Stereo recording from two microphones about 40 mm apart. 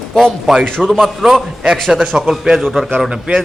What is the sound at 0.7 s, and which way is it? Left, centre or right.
Speech, centre.